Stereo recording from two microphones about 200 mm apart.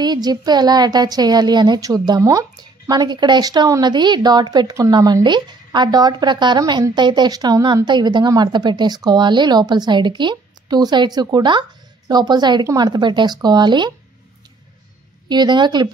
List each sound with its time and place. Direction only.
0.0 s a woman's voice: 20° right (ahead or behind)
15.2 s a woman's voice: 20° right (ahead or behind)